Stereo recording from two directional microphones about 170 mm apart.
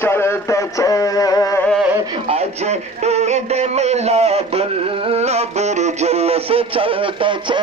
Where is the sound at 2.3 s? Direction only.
40° right (ahead or behind).